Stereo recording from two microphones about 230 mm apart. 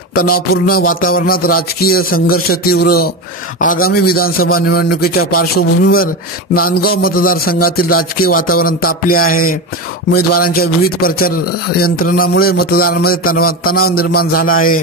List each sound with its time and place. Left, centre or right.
0.1 s music: left